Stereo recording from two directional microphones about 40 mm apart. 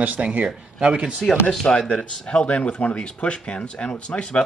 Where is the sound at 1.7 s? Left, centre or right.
Left.